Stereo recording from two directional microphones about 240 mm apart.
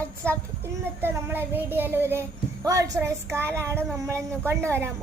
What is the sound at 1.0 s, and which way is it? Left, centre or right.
A woman's voice, centre.